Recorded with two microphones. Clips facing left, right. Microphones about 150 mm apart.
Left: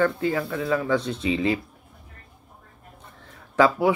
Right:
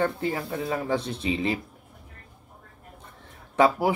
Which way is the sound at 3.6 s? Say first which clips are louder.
Left 2 dB; 30° right (ahead or behind).